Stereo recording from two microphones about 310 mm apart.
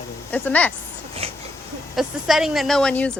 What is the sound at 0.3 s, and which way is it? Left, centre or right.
Speech, centre.